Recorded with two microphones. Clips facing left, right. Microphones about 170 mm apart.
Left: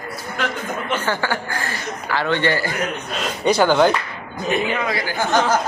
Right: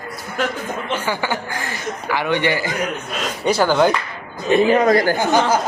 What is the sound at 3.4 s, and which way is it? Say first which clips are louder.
Speech: left 1 dB; 5° right (ahead or behind).